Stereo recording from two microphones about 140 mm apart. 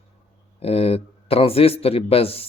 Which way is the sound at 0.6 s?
45° left (ahead or behind).